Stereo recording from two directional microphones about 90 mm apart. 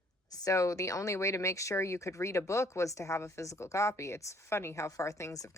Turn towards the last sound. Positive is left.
turn(degrees=35)  # may be behind; listen again after turning